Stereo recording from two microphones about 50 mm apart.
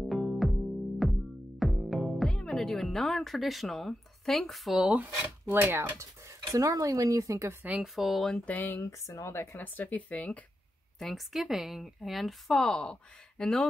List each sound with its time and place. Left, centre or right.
0.1 s music: centre
2.2 s music: centre
2.5 s a woman's voice: centre
5.5 s speech: right
5.9 s speech: right
7.8 s a woman's voice: centre
8.5 s speech: left
9.0 s speech: left
9.6 s speech: left
11.0 s a woman's voice: centre